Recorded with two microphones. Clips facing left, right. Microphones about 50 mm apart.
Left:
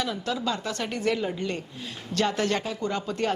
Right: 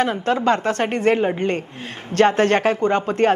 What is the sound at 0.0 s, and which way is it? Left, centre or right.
Speech, right.